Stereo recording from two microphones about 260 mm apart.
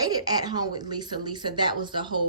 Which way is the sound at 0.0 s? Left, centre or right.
Centre.